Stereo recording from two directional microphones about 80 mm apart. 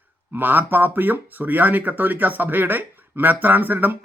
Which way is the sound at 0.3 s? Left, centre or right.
Right.